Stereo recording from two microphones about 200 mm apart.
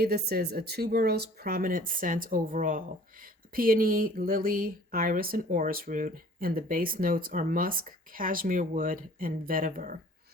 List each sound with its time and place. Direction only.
0.0 s speech: 50° right (ahead or behind)